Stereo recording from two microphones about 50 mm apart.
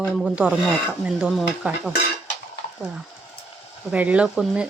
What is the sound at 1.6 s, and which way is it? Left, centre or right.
Speech, right.